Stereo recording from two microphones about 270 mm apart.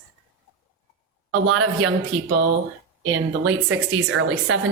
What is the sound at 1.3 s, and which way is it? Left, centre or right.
Speech, right.